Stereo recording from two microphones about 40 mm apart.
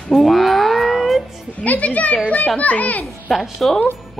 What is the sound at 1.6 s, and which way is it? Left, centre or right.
Speech, left.